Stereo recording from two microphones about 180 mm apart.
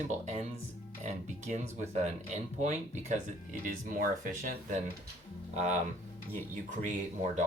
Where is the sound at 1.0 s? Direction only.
40° right (ahead or behind).